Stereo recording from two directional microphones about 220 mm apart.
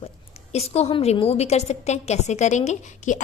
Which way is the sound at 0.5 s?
30° left (ahead or behind).